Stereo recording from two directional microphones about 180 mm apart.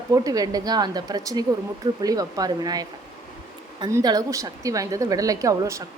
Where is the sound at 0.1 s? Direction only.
20° right (ahead or behind).